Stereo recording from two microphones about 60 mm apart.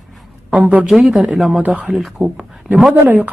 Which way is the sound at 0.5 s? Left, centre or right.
Right.